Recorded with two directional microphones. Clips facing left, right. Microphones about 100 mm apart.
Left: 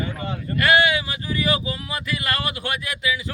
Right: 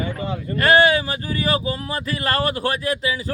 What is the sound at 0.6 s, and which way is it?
A man's voice, 35° right (ahead or behind).